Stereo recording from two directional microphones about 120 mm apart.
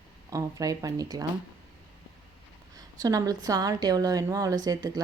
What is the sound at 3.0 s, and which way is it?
A woman's voice, 30° right (ahead or behind).